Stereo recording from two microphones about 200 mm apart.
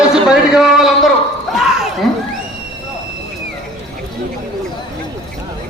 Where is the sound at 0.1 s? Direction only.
5° right (ahead or behind).